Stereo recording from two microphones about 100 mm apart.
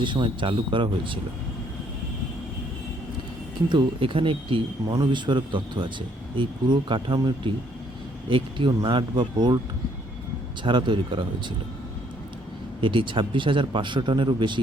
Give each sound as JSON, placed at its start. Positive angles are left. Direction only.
{"t": 0.0, "sound": "speech", "side_deg": -55}
{"t": 3.7, "sound": "speech", "side_deg": -55}
{"t": 8.3, "sound": "speech", "side_deg": -60}
{"t": 10.6, "sound": "speech", "side_deg": -50}
{"t": 12.8, "sound": "speech", "side_deg": -55}